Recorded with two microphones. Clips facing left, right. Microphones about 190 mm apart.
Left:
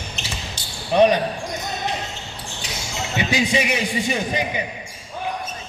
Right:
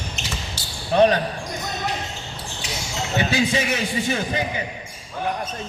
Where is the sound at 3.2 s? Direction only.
15° left (ahead or behind).